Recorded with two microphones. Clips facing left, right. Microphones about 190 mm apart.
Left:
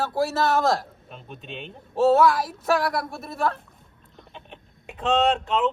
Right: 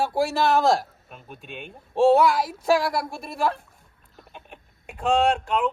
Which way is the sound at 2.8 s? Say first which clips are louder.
Even; 25° right (ahead or behind).